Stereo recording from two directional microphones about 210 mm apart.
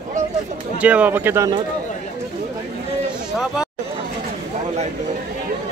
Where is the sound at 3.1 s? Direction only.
Centre (ahead or behind).